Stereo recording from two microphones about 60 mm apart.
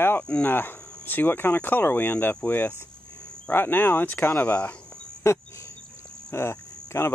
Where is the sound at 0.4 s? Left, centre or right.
Left.